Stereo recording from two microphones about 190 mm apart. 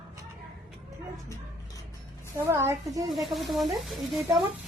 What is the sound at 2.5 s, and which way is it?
Speech, 15° right (ahead or behind).